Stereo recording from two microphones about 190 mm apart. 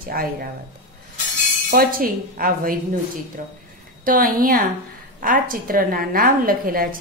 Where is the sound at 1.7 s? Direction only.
50° right (ahead or behind).